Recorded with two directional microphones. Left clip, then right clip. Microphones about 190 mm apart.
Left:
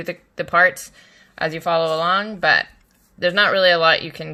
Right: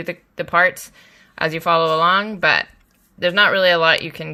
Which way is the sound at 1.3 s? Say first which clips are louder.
Right 3 dB; 20° right (ahead or behind).